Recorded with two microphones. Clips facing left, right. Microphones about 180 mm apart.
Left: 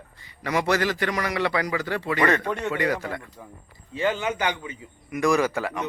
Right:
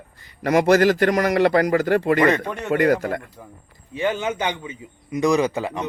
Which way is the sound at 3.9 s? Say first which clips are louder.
Right 2 dB; 20° right (ahead or behind).